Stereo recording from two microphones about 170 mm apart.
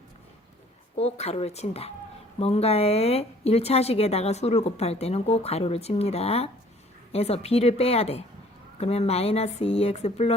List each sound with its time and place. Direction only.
0.9 s a woman's voice: 40° left (ahead or behind)